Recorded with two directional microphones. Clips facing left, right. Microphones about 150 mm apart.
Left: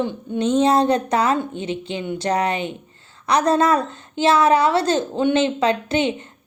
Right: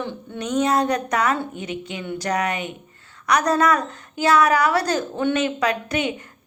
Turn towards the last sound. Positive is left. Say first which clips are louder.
# left 3 dB
turn(degrees=25)  # may be behind; listen again after turning